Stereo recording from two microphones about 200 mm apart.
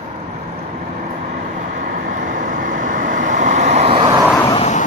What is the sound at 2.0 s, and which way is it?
Vehicle, 40° right (ahead or behind).